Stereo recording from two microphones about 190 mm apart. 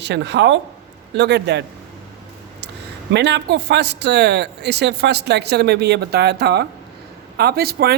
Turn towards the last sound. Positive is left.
turn(degrees=-55)  # may be behind; listen again after turning